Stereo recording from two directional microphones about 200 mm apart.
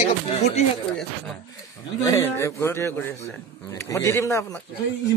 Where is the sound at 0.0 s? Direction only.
35° left (ahead or behind).